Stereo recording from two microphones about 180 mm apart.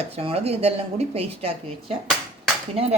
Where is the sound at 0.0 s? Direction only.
35° right (ahead or behind).